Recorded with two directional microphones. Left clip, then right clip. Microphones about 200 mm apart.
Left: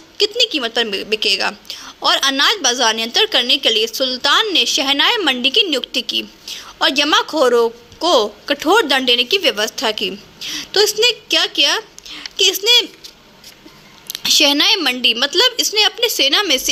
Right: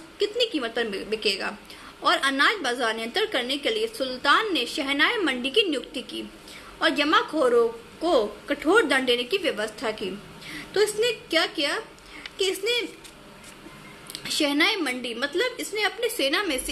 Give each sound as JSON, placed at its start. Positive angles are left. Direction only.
{"t": 0.2, "sound": "a woman's voice", "side_deg": 35}
{"t": 14.1, "sound": "a woman's voice", "side_deg": 40}